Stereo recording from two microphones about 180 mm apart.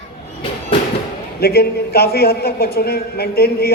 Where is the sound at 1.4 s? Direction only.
60° left (ahead or behind).